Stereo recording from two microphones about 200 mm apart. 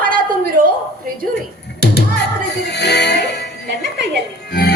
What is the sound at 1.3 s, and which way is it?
Music, 55° left (ahead or behind).